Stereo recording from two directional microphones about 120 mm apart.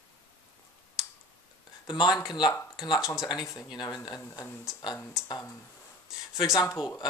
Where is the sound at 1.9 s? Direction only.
35° left (ahead or behind).